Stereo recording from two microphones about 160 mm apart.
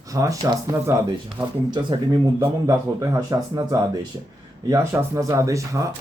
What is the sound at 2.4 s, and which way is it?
Speech, 20° right (ahead or behind).